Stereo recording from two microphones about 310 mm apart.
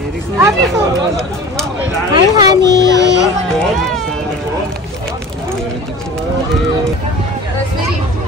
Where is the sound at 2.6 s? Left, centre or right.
Right.